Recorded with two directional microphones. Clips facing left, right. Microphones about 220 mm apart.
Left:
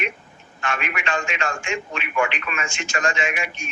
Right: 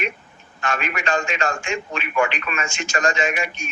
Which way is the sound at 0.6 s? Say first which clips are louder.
Right 2 dB; 40° right (ahead or behind).